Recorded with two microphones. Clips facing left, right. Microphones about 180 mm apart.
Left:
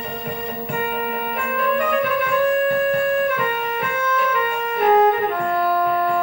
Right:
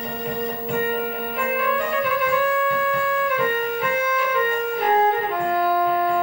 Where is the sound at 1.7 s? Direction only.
60° left (ahead or behind).